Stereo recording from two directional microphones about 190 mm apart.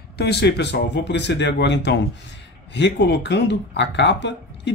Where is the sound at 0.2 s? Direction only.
60° left (ahead or behind).